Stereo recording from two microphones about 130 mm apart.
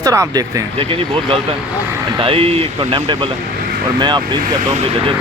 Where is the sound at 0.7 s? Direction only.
40° right (ahead or behind).